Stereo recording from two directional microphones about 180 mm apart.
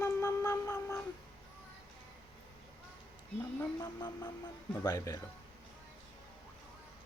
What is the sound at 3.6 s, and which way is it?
Speech, 20° left (ahead or behind).